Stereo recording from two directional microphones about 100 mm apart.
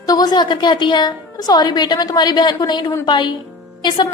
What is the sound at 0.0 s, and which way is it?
A woman's voice, 40° left (ahead or behind).